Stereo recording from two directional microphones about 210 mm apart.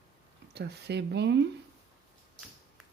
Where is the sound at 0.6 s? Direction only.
50° right (ahead or behind).